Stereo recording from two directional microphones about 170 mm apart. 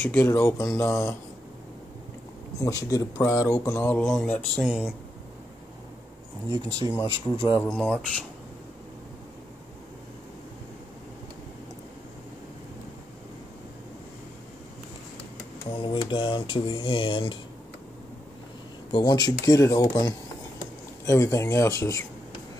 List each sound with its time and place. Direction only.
0.0 s speech: 10° left (ahead or behind)
2.6 s speech: 20° left (ahead or behind)
4.6 s speech: 5° right (ahead or behind)
6.5 s speech: 20° right (ahead or behind)
6.9 s speech: 20° left (ahead or behind)
7.3 s speech: 30° left (ahead or behind)
7.6 s speech: 5° left (ahead or behind)
15.6 s speech: 30° left (ahead or behind)
18.9 s speech: 25° left (ahead or behind)